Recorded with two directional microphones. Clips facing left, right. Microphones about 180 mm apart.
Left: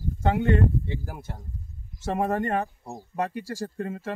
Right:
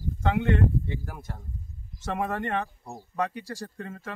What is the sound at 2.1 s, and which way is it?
Speech, 40° left (ahead or behind).